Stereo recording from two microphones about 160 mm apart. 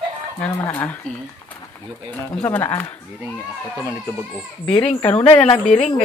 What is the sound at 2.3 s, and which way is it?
Speech, 10° left (ahead or behind).